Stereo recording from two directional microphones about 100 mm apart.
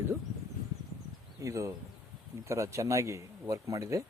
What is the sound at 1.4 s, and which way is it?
Speech, 30° right (ahead or behind).